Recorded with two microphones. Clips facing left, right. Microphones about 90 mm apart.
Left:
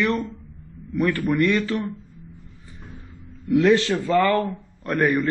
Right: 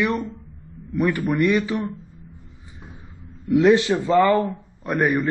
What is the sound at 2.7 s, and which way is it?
Vehicle, 15° right (ahead or behind).